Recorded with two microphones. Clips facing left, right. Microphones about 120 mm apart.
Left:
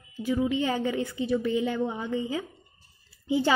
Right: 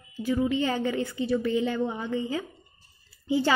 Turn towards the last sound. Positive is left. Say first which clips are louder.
# even
turn(degrees=15)  # may be behind; listen again after turning